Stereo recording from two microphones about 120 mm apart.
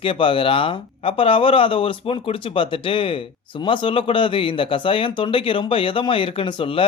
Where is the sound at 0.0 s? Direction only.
45° left (ahead or behind).